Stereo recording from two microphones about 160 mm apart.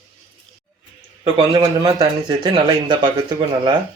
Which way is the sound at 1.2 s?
35° right (ahead or behind).